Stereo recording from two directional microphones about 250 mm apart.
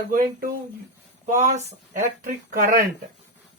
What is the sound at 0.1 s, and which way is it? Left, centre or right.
Speech, right.